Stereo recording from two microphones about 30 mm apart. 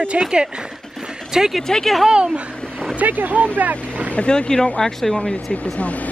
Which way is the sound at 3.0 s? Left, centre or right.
Right.